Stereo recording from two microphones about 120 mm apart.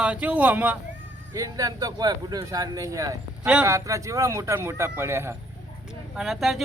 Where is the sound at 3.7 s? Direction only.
25° right (ahead or behind).